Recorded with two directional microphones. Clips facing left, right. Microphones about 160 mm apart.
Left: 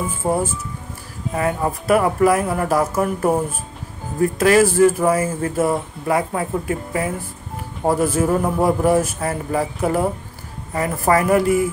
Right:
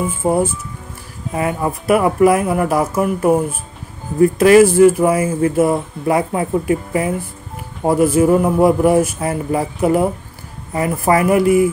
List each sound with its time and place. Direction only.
0.2 s a man's voice: 15° right (ahead or behind)
4.4 s a man's voice: 20° right (ahead or behind)